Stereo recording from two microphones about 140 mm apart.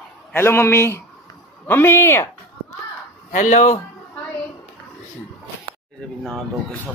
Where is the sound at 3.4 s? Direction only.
60° left (ahead or behind).